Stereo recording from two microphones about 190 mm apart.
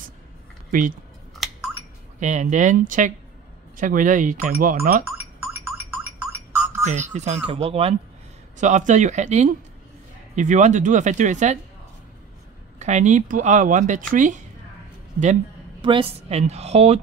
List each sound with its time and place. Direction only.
0.7 s speech: 45° right (ahead or behind)
2.1 s speech: 40° right (ahead or behind)
5.0 s a sound: 15° right (ahead or behind)
6.8 s speech: 35° right (ahead or behind)
12.7 s speech: 35° right (ahead or behind)
15.8 s speech: 25° right (ahead or behind)